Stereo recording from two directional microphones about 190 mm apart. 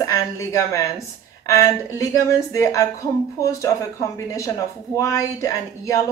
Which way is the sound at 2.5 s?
15° left (ahead or behind).